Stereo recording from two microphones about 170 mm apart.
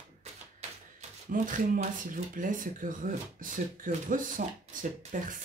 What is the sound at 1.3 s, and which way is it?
Speech, 50° right (ahead or behind).